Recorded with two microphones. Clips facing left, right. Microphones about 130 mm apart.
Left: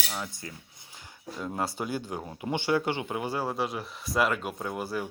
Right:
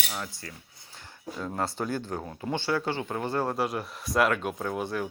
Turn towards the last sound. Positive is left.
turn(degrees=5)  # may be behind; listen again after turning